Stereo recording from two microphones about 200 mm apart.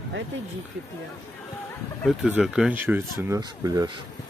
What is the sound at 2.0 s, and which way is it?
Speech, 5° right (ahead or behind).